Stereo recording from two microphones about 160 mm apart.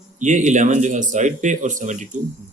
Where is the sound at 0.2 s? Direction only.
50° right (ahead or behind).